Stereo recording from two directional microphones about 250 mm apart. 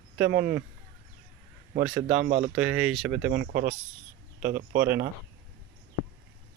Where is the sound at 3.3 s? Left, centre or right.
Right.